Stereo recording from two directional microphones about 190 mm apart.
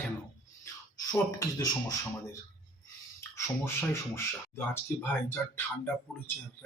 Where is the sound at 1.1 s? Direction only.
20° left (ahead or behind).